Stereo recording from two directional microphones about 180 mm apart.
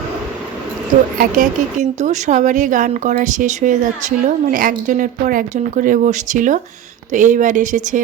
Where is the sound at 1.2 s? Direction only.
45° right (ahead or behind).